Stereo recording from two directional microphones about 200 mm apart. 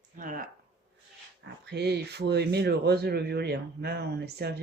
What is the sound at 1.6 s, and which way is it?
Speech, 55° right (ahead or behind).